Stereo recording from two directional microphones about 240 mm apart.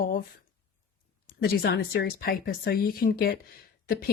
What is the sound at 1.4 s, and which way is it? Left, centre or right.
Speech, left.